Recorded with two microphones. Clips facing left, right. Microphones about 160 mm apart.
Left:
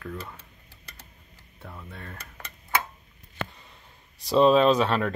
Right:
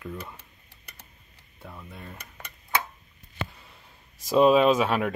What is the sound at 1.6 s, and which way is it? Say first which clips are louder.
Speech: even; 5° right (ahead or behind).